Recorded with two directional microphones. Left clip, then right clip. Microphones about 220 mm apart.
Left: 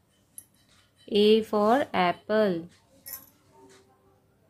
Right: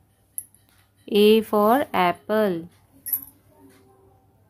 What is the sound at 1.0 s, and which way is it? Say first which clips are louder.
Speech: right 4 dB; 15° right (ahead or behind).